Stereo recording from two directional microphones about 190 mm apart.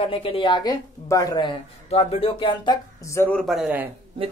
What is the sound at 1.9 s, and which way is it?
Speech, 30° left (ahead or behind).